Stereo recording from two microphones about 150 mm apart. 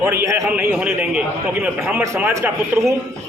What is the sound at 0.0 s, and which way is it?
Speech, 15° right (ahead or behind).